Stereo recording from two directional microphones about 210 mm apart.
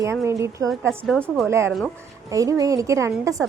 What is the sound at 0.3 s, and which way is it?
A woman's voice, 15° right (ahead or behind).